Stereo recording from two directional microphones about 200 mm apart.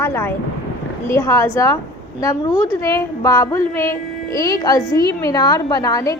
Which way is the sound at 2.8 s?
15° left (ahead or behind).